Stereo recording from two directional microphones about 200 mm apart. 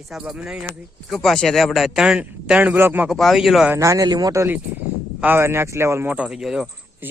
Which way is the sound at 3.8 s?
15° right (ahead or behind).